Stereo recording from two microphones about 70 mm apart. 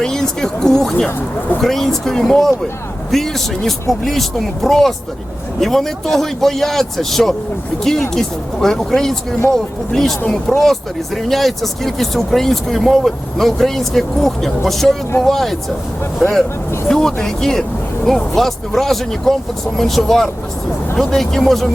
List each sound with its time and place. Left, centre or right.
0.0 s speech: centre
8.6 s speech: centre